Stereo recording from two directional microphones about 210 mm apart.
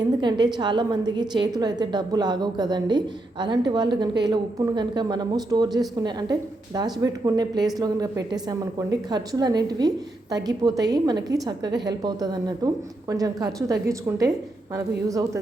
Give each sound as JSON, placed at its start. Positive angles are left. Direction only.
{"t": 0.0, "sound": "a woman's voice", "side_deg": -20}